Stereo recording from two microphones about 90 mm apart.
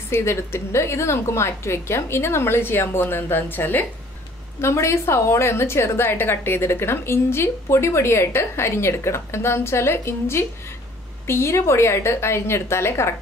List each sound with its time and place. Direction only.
0.1 s a woman's voice: 30° left (ahead or behind)